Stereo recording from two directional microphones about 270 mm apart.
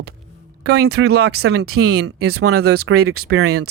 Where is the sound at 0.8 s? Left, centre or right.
Right.